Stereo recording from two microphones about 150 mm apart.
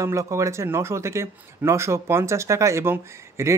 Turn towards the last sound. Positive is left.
turn(degrees=-20)  # may be behind; listen again after turning